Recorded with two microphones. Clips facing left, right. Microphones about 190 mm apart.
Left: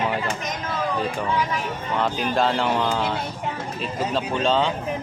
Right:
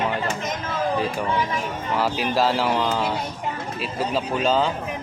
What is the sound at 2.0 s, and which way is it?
Speech, 5° right (ahead or behind).